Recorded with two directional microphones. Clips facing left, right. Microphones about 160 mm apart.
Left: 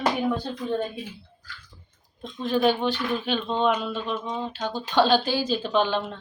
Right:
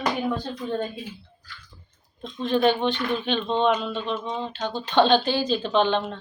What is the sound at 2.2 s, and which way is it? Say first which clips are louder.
Speech: right 1 dB; 5° left (ahead or behind).